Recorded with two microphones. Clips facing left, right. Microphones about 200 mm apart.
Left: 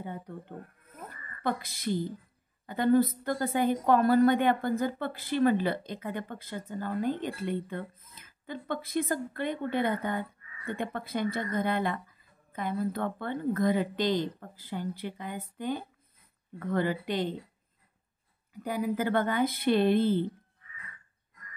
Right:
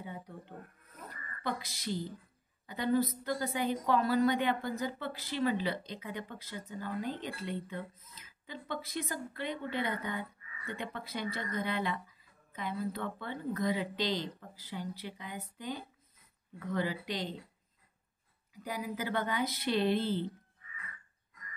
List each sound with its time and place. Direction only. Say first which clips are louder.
0.0 s a woman's voice: left 5 dB; 55° left (ahead or behind)
18.5 s speech: left 8 dB; 55° left (ahead or behind)